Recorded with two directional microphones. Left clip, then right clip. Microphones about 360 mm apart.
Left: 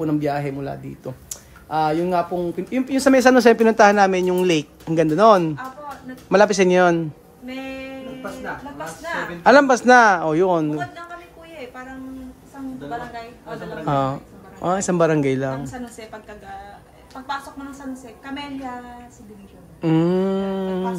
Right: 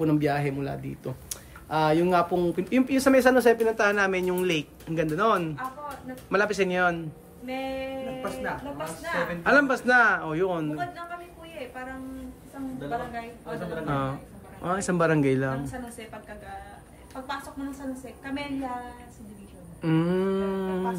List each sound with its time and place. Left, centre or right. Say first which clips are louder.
0.0 s speech: left 3 dB; centre
3.0 s speech: left 7 dB; centre
7.4 s a sound: even; centre
9.4 s speech: left 9 dB; centre
13.8 s speech: left 12 dB; centre
19.8 s speech: left 7 dB; centre